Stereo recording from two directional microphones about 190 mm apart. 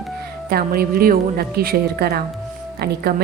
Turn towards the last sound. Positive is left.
turn(degrees=-55)  # may be behind; listen again after turning